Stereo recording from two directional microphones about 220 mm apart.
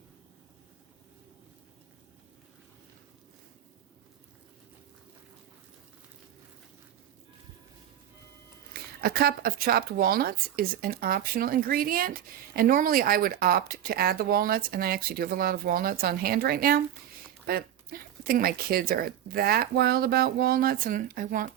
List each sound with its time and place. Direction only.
8.7 s speech: 45° right (ahead or behind)